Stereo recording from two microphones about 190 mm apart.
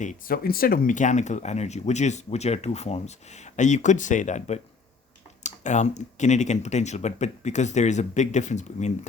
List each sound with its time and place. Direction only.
0.0 s speech: 45° left (ahead or behind)